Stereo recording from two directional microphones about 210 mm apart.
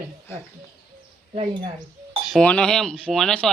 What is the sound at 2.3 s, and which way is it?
Speech, 5° left (ahead or behind).